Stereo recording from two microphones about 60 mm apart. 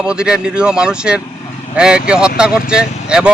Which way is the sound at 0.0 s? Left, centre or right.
Centre.